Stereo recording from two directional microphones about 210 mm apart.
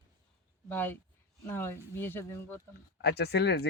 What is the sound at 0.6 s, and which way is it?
Speech, 10° left (ahead or behind).